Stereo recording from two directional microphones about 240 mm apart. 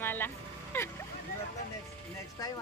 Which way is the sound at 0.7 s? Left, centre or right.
Centre.